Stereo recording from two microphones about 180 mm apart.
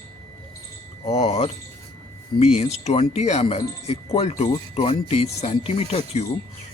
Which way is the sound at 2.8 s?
35° left (ahead or behind).